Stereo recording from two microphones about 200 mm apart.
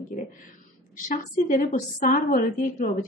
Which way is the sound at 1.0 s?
40° left (ahead or behind).